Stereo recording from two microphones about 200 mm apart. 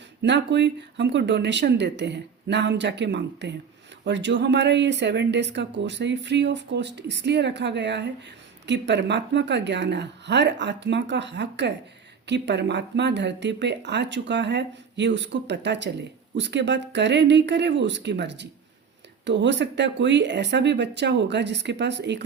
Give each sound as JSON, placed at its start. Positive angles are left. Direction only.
{"t": 0.2, "sound": "speech", "side_deg": -60}